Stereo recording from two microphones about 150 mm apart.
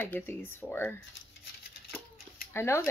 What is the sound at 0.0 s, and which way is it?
Speech, 15° left (ahead or behind).